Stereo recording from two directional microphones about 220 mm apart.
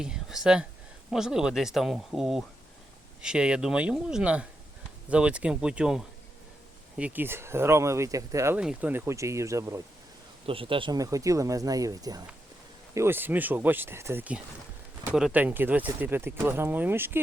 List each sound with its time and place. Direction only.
0.0 s speech: 5° right (ahead or behind)
10.4 s speech: 25° right (ahead or behind)